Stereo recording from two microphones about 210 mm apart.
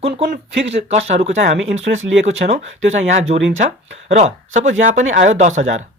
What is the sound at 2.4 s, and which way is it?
Speech, 50° right (ahead or behind).